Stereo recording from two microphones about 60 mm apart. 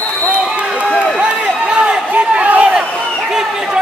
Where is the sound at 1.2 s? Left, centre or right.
Centre.